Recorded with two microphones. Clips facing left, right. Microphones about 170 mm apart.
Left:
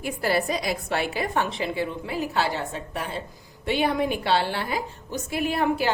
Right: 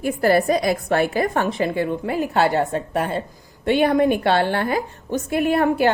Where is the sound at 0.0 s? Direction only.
50° right (ahead or behind).